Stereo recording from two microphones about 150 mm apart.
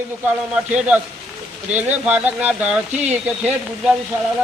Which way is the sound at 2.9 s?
50° right (ahead or behind).